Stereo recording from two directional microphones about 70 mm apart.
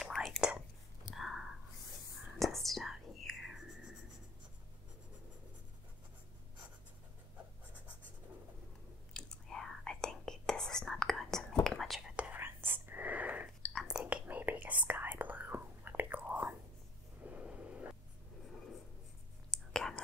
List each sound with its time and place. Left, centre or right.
0.0 s whispering: centre
0.4 s whispering: centre
9.1 s whispering: centre
12.4 s whispering: right
17.2 s a sound: centre
19.5 s whispering: centre